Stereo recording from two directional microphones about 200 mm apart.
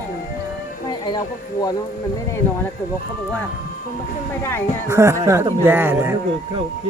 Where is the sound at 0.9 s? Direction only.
20° left (ahead or behind).